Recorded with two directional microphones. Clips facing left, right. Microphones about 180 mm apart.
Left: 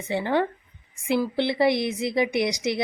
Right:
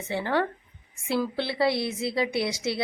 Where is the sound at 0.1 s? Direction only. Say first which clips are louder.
Left 3 dB; 15° left (ahead or behind).